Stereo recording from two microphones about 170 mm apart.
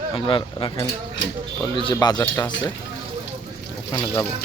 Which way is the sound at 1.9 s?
20° left (ahead or behind).